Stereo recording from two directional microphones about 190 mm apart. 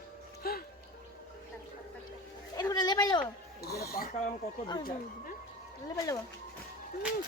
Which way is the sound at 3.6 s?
55° left (ahead or behind).